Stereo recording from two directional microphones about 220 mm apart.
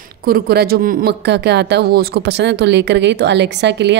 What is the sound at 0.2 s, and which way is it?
A woman's voice, 45° right (ahead or behind).